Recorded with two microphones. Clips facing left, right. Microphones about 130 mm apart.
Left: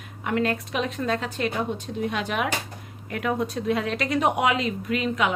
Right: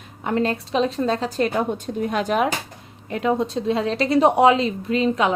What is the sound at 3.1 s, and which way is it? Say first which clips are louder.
A woman's voice: right 5 dB; 25° right (ahead or behind).